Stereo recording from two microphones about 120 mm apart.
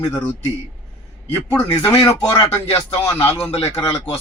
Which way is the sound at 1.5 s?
10° left (ahead or behind).